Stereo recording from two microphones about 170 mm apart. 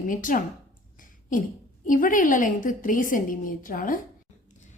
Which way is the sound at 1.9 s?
50° left (ahead or behind).